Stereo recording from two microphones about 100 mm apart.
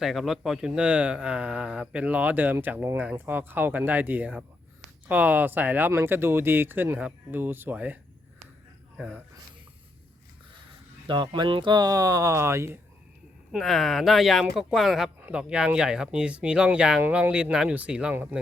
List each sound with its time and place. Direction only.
0.0 s speech: 5° right (ahead or behind)
9.0 s speech: 10° right (ahead or behind)
11.0 s speech: 55° right (ahead or behind)
11.7 s speech: 40° right (ahead or behind)
13.5 s speech: centre (ahead or behind); by 18.3 s 15° right (ahead or behind)